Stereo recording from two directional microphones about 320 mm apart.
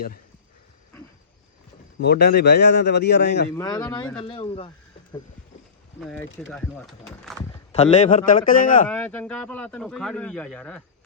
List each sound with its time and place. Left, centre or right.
2.0 s a man's voice: left
3.5 s speech: centre
6.0 s speech: centre
7.7 s a man's voice: left
8.9 s speech: centre